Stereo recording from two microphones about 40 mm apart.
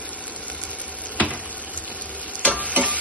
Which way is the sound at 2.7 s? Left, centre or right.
Right.